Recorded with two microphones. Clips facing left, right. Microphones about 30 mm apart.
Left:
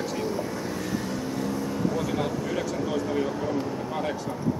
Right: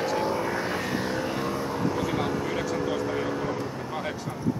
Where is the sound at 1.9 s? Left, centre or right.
Centre.